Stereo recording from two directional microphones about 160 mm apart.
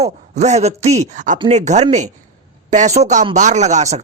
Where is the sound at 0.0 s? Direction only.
45° right (ahead or behind).